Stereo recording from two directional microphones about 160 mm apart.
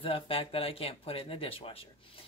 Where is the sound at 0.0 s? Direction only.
35° left (ahead or behind).